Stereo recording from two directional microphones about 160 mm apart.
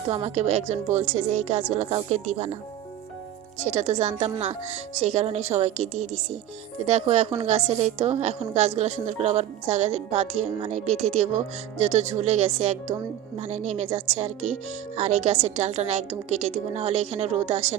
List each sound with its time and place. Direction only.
0.1 s a woman's voice: 40° right (ahead or behind)
3.6 s a woman's voice: 45° right (ahead or behind)